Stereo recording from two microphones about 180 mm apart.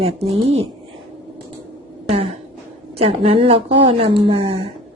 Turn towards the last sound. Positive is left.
turn(degrees=-35)  # may be behind; listen again after turning